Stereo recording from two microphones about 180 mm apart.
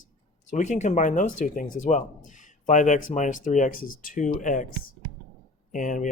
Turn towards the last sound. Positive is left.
turn(degrees=45)  # may be behind; listen again after turning